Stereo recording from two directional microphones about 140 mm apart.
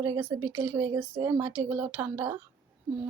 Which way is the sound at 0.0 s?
25° right (ahead or behind).